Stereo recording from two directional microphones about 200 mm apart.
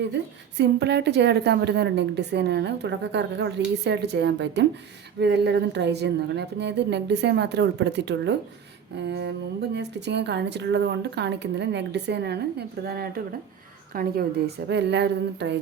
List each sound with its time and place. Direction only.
0.1 s speech: 60° right (ahead or behind)